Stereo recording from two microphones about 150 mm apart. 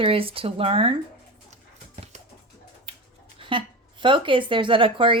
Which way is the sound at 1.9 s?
45° right (ahead or behind).